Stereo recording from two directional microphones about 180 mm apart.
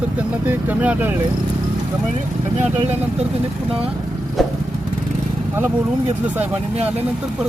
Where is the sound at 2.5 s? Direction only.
40° right (ahead or behind).